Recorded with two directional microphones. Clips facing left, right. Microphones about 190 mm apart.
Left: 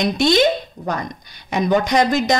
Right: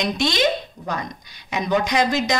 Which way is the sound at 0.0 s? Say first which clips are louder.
Left 5 dB; 50° left (ahead or behind).